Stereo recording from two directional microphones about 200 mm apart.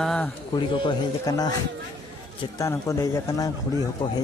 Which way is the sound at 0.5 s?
25° left (ahead or behind).